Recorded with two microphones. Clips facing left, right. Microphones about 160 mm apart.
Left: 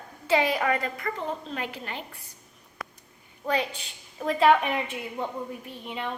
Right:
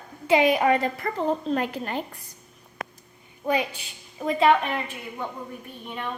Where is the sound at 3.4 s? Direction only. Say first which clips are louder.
Right 2 dB; 10° right (ahead or behind).